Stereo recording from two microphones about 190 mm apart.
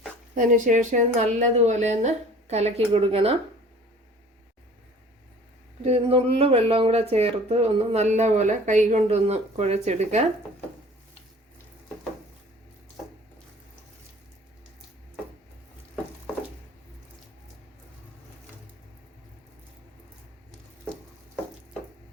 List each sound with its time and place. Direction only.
0.3 s speech: 45° right (ahead or behind)
5.8 s speech: 30° right (ahead or behind)